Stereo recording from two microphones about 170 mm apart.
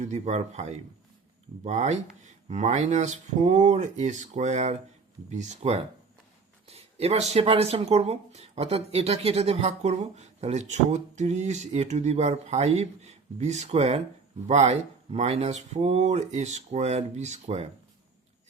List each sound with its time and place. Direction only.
0.0 s speech: 40° right (ahead or behind)